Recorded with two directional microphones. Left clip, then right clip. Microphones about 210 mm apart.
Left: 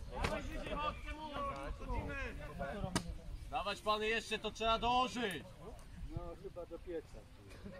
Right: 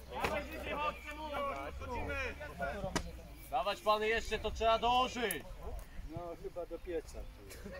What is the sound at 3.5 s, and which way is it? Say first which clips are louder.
A man's voice: right 5 dB; 55° left (ahead or behind).